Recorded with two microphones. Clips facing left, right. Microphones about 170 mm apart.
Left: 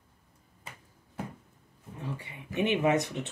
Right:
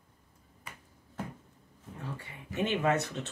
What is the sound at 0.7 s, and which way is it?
Finger snapping, 25° left (ahead or behind).